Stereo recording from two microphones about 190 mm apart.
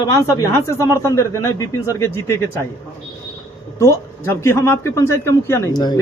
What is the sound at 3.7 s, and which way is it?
A man's voice, 15° left (ahead or behind).